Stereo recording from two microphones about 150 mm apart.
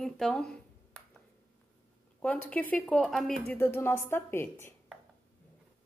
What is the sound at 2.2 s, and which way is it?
A woman's voice, 10° left (ahead or behind).